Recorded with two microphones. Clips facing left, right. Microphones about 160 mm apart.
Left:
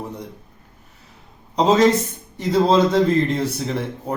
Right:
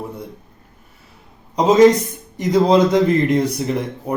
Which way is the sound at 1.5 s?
10° right (ahead or behind).